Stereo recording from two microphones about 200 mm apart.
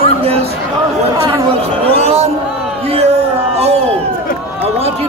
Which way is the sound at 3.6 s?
30° right (ahead or behind).